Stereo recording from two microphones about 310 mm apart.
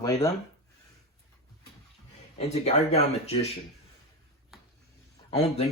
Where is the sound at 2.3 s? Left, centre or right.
Centre.